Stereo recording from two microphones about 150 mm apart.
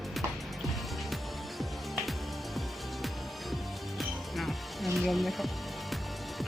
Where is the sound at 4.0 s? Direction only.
Centre (ahead or behind).